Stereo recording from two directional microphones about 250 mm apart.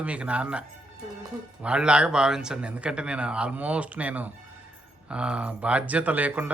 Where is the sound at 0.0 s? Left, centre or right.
Centre.